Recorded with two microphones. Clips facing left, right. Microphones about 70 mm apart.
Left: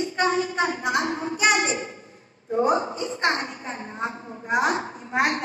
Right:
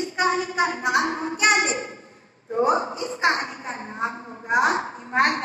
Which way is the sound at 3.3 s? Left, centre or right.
Right.